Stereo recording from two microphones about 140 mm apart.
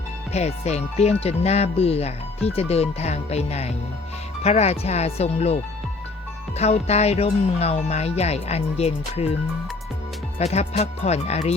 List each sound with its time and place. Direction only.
0.3 s speech: 50° left (ahead or behind)
6.6 s speech: 50° left (ahead or behind)
10.3 s speech: 50° left (ahead or behind)